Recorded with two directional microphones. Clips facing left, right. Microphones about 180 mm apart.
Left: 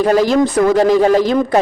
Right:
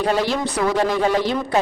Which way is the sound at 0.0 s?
40° left (ahead or behind).